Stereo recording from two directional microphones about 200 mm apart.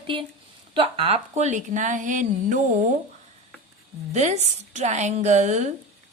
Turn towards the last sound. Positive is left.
turn(degrees=-35)  # may be behind; listen again after turning